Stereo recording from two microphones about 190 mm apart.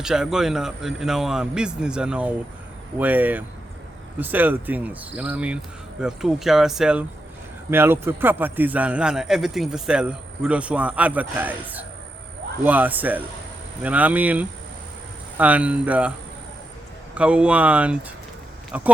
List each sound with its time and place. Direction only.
0.0 s a man's voice: 5° right (ahead or behind)
17.2 s a man's voice: 5° right (ahead or behind)